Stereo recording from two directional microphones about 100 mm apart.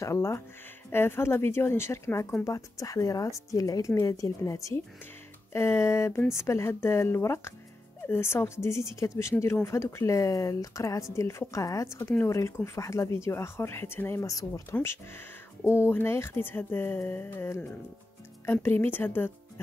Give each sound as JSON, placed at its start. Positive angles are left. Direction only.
{"t": 0.0, "sound": "a woman's voice", "side_deg": 30}
{"t": 14.2, "sound": "a woman's voice", "side_deg": 35}